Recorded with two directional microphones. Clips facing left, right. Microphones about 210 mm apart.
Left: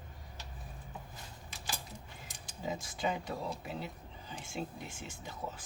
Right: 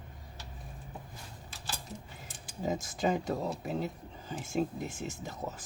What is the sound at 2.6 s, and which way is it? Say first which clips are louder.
Speech: right 5 dB; 45° right (ahead or behind).